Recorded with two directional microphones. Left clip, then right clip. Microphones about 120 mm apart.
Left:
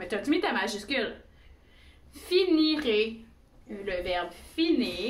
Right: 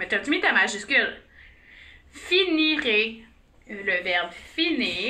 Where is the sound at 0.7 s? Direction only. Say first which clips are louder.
Right 8 dB; 5° left (ahead or behind).